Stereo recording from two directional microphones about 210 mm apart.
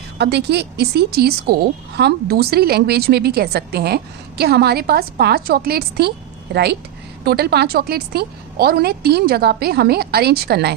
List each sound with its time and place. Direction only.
0.2 s a woman's voice: 55° right (ahead or behind)